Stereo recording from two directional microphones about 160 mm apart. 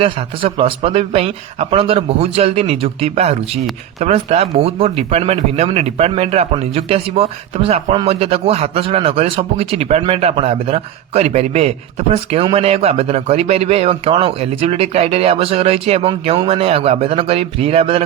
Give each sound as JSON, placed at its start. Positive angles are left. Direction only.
{"t": 0.0, "sound": "speech", "side_deg": -35}